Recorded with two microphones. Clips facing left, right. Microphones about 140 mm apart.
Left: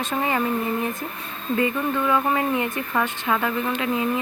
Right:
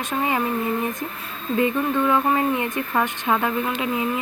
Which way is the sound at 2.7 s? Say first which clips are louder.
Right 2 dB; 15° right (ahead or behind).